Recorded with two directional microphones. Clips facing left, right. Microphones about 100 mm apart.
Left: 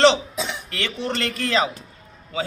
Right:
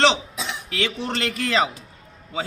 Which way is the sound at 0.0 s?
5° right (ahead or behind).